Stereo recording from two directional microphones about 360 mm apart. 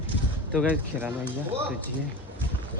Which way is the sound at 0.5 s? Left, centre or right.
Centre.